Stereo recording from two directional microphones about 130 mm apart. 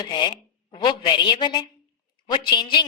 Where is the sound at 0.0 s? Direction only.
35° left (ahead or behind).